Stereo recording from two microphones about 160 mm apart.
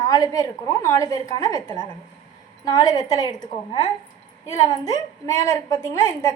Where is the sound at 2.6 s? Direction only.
25° left (ahead or behind).